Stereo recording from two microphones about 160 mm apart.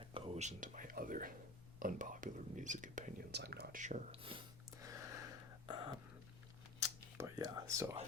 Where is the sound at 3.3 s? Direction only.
90° right.